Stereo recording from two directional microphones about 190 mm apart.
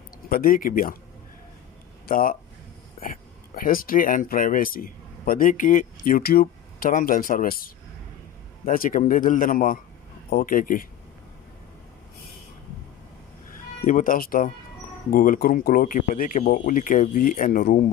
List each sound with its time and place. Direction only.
0.3 s speech: 50° left (ahead or behind)
2.0 s speech: 45° left (ahead or behind)
13.8 s speech: 45° left (ahead or behind)